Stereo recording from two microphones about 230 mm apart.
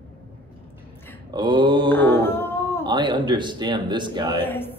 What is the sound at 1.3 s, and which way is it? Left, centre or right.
Speech, right.